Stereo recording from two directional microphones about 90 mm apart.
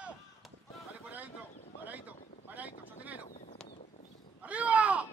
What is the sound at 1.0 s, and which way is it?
Boat, 20° right (ahead or behind).